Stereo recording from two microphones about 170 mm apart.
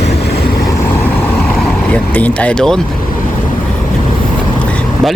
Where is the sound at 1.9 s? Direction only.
10° left (ahead or behind).